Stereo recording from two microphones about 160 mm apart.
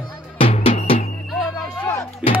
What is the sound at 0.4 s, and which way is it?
Drum, 35° left (ahead or behind).